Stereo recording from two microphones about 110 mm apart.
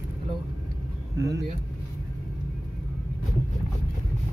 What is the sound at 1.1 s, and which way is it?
Speech, 30° right (ahead or behind).